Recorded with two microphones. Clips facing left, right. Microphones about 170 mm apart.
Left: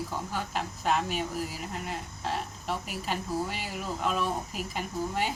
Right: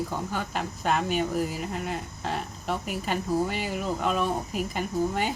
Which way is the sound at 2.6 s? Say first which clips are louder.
Right 6 dB; 55° right (ahead or behind).